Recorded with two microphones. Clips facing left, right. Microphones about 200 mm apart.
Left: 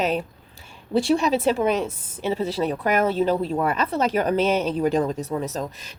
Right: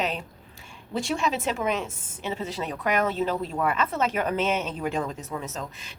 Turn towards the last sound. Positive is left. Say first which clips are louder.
# left 6 dB
turn(degrees=40)  # may be behind; listen again after turning